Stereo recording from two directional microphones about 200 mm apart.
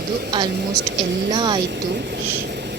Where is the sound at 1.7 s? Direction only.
55° right (ahead or behind).